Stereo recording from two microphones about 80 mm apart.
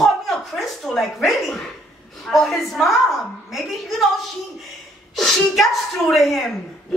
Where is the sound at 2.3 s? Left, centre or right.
Centre.